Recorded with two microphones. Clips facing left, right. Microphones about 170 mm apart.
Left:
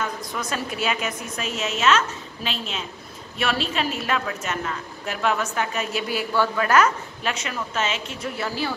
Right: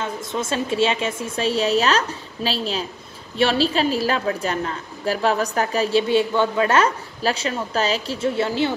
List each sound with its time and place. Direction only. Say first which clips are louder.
0.0 s a woman's voice: right 3 dB; 25° right (ahead or behind)